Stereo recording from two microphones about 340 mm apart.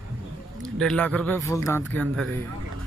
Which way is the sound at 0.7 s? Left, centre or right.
Centre.